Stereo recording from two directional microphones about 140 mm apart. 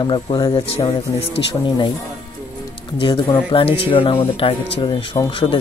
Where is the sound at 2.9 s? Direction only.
35° left (ahead or behind).